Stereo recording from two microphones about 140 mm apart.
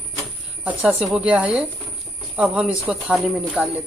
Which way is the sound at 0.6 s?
10° right (ahead or behind).